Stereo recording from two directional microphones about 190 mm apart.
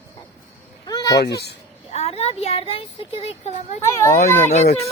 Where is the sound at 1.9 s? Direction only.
35° left (ahead or behind).